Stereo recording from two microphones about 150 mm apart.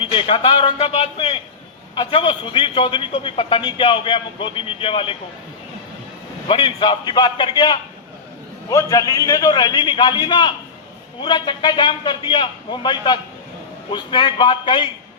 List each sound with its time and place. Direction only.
0.0 s a man's voice: 35° left (ahead or behind)
6.5 s a man's voice: 35° left (ahead or behind)